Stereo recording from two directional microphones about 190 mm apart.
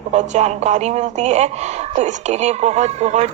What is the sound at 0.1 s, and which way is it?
A woman's voice, 35° right (ahead or behind).